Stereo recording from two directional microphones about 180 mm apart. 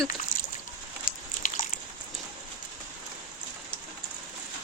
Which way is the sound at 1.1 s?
50° left (ahead or behind).